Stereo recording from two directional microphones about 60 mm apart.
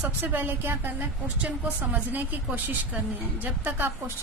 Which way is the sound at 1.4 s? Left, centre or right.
Right.